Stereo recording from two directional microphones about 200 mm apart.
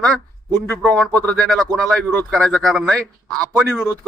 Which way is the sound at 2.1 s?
10° left (ahead or behind).